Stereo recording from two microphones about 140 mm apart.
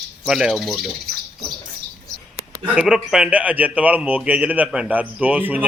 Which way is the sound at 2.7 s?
5° right (ahead or behind).